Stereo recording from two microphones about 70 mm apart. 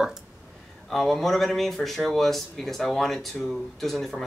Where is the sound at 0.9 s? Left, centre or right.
Centre.